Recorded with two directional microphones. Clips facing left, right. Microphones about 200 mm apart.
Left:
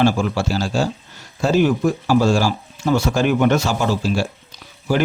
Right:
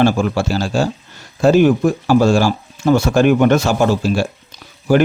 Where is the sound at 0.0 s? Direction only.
55° right (ahead or behind).